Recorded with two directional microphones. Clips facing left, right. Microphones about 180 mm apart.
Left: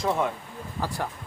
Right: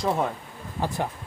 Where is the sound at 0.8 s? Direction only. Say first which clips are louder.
Right 3 dB; 20° right (ahead or behind).